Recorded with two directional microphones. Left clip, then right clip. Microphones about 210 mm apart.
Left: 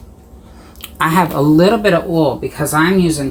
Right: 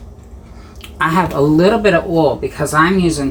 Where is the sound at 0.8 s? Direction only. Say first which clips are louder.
Left 1 dB; 30° left (ahead or behind).